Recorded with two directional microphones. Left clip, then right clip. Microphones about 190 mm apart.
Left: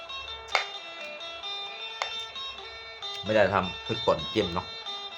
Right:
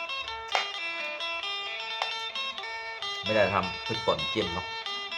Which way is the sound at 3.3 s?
30° left (ahead or behind).